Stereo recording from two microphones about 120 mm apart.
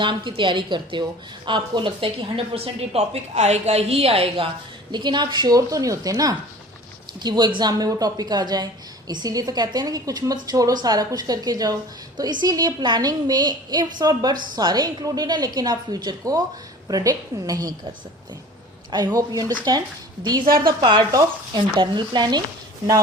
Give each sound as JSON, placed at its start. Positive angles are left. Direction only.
{"t": 0.0, "sound": "a woman's voice", "side_deg": -40}
{"t": 18.9, "sound": "a woman's voice", "side_deg": -35}